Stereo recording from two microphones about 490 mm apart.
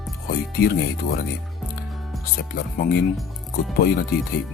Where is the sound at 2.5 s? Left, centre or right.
Centre.